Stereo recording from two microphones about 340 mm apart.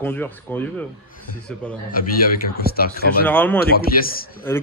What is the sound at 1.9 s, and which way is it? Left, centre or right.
A man's voice, left.